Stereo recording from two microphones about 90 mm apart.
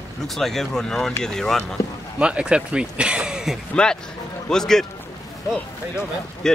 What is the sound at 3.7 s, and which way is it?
Speech, 10° left (ahead or behind).